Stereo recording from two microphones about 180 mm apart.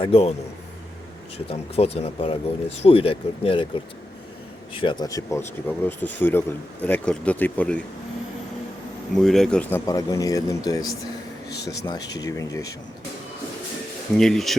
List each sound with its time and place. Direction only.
0.0 s speech: 35° left (ahead or behind)
1.5 s speech: 35° left (ahead or behind)
4.8 s speech: 25° left (ahead or behind); by 7.8 s 10° left (ahead or behind)
9.1 s speech: centre (ahead or behind); by 12.6 s 20° left (ahead or behind)
14.2 s speech: centre (ahead or behind)